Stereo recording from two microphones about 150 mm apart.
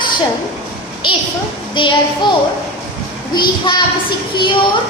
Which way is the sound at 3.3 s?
30° left (ahead or behind).